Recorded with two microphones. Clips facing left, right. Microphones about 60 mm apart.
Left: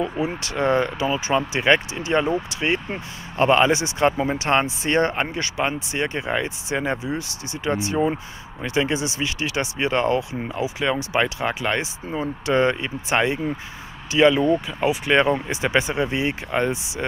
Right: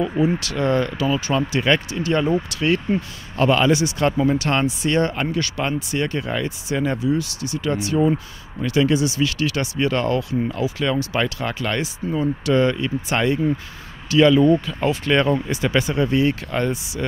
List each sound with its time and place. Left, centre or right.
0.2 s speech: left